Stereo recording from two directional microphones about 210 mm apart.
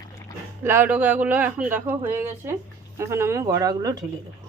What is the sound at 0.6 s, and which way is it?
Speech, 10° right (ahead or behind).